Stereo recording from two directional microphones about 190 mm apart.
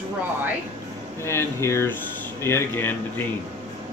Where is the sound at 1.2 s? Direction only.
15° left (ahead or behind).